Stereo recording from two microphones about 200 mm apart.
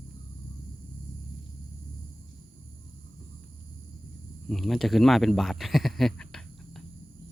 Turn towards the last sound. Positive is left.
turn(degrees=0)  # may be behind; listen again after turning